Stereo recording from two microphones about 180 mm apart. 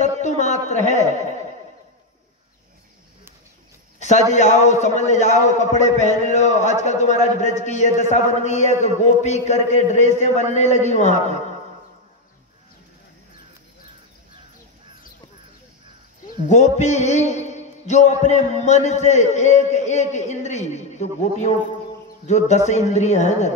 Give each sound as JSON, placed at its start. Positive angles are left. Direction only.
{"t": 0.0, "sound": "a sound", "side_deg": 40}
{"t": 4.0, "sound": "a man's voice", "side_deg": 40}
{"t": 16.4, "sound": "a man's voice", "side_deg": 40}